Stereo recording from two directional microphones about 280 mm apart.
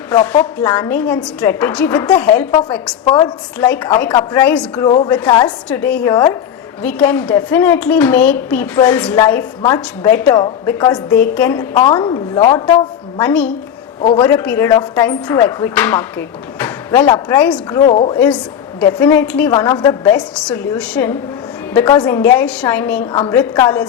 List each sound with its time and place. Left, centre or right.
0.1 s a woman's voice: centre
4.9 s a woman's voice: centre
14.0 s a man's voice: left
14.3 s a woman's voice: centre
18.8 s a woman's voice: centre
23.1 s a woman's voice: centre